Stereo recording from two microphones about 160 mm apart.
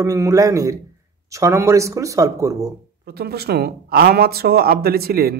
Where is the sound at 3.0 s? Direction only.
85° right.